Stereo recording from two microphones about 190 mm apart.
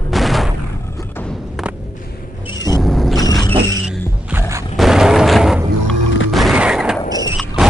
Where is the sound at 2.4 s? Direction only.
20° left (ahead or behind).